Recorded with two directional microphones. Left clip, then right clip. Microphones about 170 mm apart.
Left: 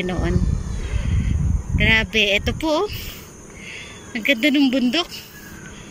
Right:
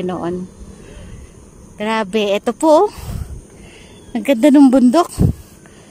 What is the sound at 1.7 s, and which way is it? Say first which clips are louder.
Speech: left 1 dB; 25° right (ahead or behind).